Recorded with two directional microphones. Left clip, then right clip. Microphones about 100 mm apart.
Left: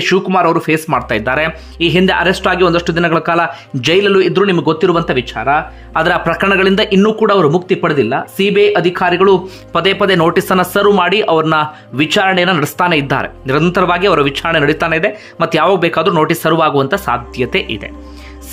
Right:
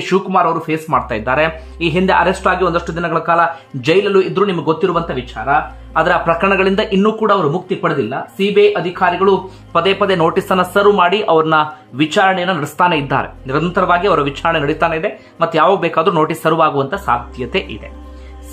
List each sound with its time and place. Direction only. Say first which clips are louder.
0.0 s speech: left 2 dB; 30° left (ahead or behind)
0.8 s speech: left 1 dB; 25° left (ahead or behind)
6.4 s speech: left 2 dB; 25° left (ahead or behind); by 9.8 s 50° left (ahead or behind)
9.8 s speech: left 2 dB; 35° left (ahead or behind)
12.6 s speech: left 1 dB; 15° left (ahead or behind)
13.7 s speech: left 1 dB; 45° left (ahead or behind)
16.1 s speech: left 2 dB; 30° left (ahead or behind)
17.5 s speech: left 2 dB; 25° left (ahead or behind)